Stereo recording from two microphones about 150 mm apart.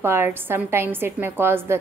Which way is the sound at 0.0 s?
15° right (ahead or behind).